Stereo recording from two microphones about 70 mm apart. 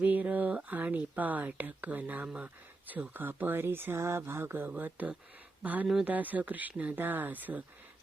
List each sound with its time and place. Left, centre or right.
0.0 s speech: right
4.7 s speech: right